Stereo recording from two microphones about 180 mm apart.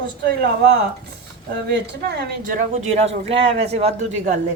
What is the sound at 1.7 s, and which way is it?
Speech, 70° right (ahead or behind).